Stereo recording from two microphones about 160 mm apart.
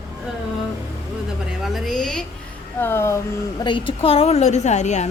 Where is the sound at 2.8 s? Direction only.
15° left (ahead or behind).